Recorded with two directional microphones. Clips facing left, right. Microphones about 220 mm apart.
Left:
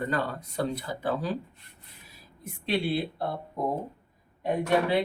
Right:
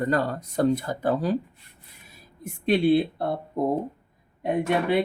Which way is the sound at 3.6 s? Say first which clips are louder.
Right 5 dB; 50° right (ahead or behind).